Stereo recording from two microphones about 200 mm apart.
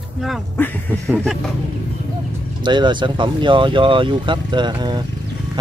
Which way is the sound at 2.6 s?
20° right (ahead or behind).